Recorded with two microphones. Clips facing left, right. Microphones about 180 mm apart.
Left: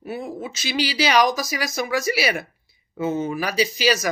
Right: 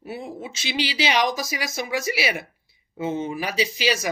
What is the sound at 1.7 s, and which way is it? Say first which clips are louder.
Speech: left 4 dB; 20° right (ahead or behind).